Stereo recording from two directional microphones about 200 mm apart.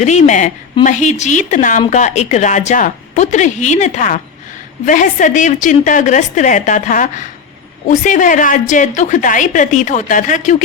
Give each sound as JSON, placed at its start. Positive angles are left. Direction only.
{"t": 0.0, "sound": "a woman's voice", "side_deg": 35}